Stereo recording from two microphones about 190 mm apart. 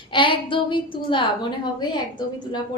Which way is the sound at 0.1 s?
25° left (ahead or behind).